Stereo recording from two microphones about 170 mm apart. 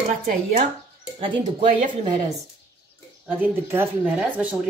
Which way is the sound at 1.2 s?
30° right (ahead or behind).